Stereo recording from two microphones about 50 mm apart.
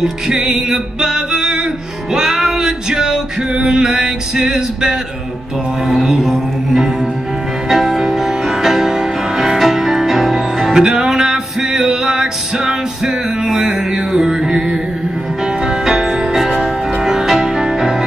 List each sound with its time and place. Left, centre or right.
0.0 s music: centre
15.8 s music: centre